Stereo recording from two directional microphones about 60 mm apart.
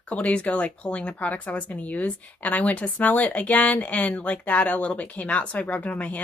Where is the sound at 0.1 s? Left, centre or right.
Left.